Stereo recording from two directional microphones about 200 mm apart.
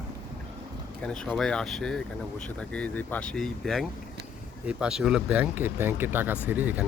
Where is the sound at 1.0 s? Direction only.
5° left (ahead or behind).